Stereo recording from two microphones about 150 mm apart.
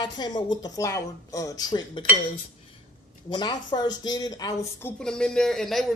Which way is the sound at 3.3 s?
30° left (ahead or behind).